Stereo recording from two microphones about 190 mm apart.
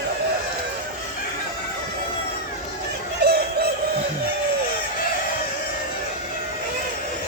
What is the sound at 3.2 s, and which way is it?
Chicken, 60° right (ahead or behind).